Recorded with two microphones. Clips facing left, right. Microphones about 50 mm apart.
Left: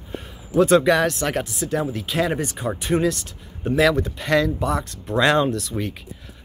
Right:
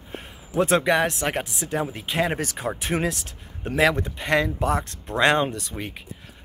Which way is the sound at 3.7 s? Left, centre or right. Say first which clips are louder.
Left 2 dB; right.